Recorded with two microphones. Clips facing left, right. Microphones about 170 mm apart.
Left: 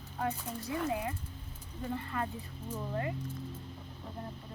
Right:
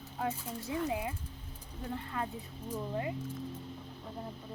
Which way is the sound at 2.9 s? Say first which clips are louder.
Left 1 dB; 15° right (ahead or behind).